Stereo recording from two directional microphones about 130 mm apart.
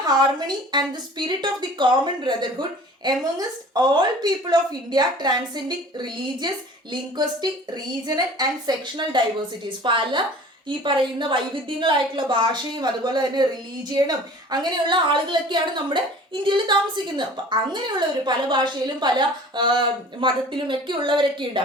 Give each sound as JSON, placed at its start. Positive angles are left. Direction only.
{"t": 0.1, "sound": "a woman's voice", "side_deg": -35}
{"t": 7.7, "sound": "a woman's voice", "side_deg": -30}